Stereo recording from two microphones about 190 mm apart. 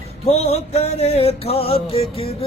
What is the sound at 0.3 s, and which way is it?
Music, 35° left (ahead or behind).